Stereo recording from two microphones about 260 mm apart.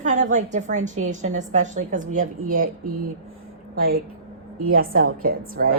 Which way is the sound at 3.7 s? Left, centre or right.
Right.